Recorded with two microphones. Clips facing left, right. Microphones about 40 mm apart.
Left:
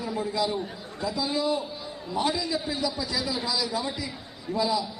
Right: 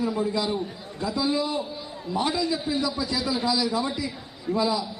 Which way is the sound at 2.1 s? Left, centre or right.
Centre.